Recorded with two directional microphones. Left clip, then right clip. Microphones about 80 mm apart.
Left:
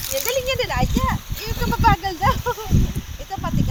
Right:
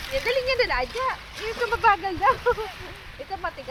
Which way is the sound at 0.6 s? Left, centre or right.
Left.